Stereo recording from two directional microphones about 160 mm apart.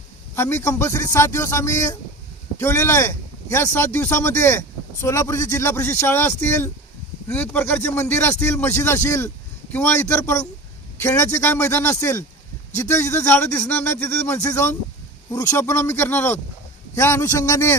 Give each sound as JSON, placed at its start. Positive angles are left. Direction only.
{"t": 0.3, "sound": "speech", "side_deg": 15}